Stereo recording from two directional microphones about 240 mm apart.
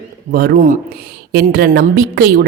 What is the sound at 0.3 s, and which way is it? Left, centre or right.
Speech, right.